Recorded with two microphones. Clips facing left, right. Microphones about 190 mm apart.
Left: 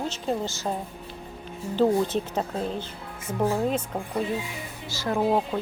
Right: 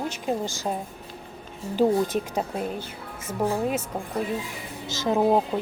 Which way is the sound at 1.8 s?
10° right (ahead or behind).